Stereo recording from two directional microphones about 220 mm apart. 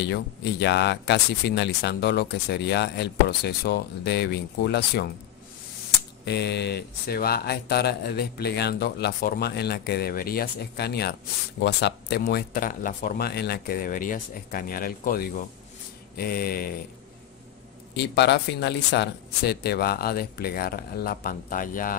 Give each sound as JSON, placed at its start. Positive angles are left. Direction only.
{"t": 0.0, "sound": "speech", "side_deg": 50}
{"t": 6.2, "sound": "speech", "side_deg": 50}
{"t": 17.9, "sound": "speech", "side_deg": 50}